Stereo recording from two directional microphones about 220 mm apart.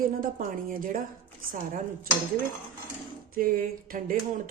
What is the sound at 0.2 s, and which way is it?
Speech, 40° right (ahead or behind).